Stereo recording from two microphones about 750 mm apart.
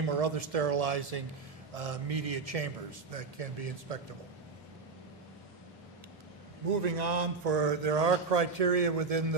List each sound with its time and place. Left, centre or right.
0.0 s a man's voice: right
6.7 s a man's voice: right